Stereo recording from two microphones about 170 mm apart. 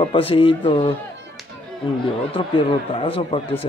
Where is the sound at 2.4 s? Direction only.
30° left (ahead or behind).